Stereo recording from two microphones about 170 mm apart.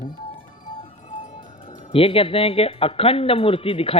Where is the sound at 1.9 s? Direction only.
35° left (ahead or behind).